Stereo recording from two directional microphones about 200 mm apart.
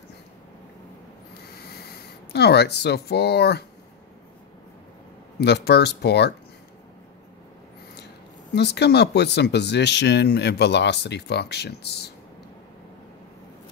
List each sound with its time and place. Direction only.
2.3 s speech: 55° left (ahead or behind)
5.4 s speech: 55° left (ahead or behind)
8.5 s speech: 55° left (ahead or behind)